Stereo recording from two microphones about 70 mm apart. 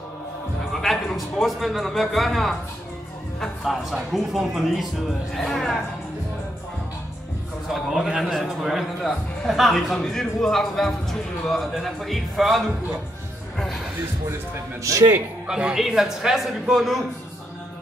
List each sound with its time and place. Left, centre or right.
0.7 s a man's voice: centre
7.7 s a man's voice: centre
14.8 s speech: right
15.4 s a man's voice: centre